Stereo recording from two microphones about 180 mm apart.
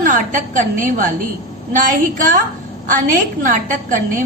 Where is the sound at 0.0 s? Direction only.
45° right (ahead or behind).